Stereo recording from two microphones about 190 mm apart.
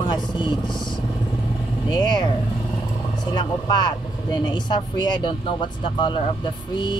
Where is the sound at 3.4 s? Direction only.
20° left (ahead or behind).